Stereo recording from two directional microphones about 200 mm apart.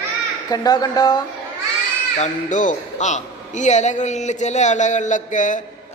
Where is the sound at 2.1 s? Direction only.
35° left (ahead or behind).